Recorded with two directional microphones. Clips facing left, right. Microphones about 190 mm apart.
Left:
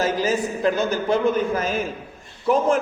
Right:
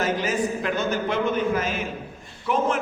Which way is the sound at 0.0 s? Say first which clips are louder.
Left 2 dB; 35° left (ahead or behind).